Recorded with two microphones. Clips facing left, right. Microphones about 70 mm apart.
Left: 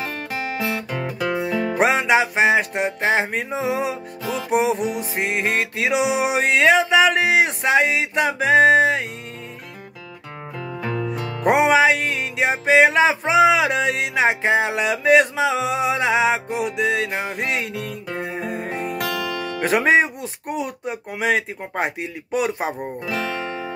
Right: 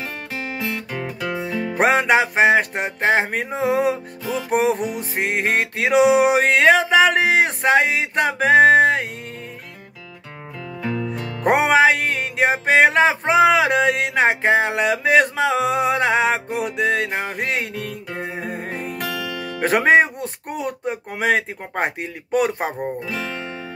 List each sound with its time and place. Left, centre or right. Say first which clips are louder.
0.4 s music: left 2 dB; centre
1.8 s music: right 2 dB; right
4.7 s music: left 1 dB; centre
5.1 s music: right 4 dB; right
11.4 s music: even; right
18.9 s music: left 2 dB; centre
19.6 s music: right 2 dB; right
23.0 s music: left 3 dB; centre